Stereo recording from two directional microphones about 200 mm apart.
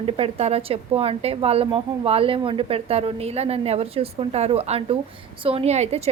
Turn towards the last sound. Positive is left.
turn(degrees=-35)  # may be behind; listen again after turning